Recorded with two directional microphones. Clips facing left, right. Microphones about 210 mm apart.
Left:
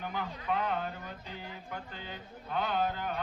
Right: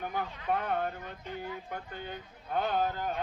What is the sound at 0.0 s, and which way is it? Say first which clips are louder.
Speech: right 2 dB; 50° right (ahead or behind).